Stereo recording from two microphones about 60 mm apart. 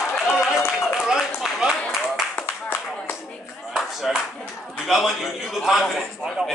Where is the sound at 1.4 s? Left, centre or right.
Centre.